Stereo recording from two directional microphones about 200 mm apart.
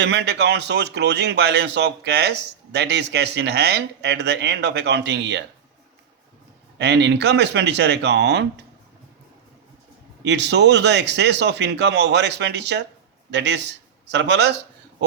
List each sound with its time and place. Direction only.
0.0 s speech: 55° right (ahead or behind)
6.7 s speech: 60° right (ahead or behind)
10.2 s speech: 60° right (ahead or behind)